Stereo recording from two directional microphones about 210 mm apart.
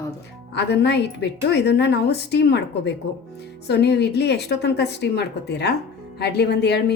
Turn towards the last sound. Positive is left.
turn(degrees=50)  # may be behind; listen again after turning